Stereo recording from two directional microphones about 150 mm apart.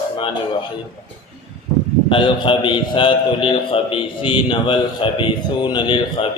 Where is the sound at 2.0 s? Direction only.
35° left (ahead or behind).